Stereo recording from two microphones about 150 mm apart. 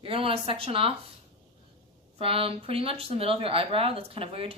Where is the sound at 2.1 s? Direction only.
40° right (ahead or behind).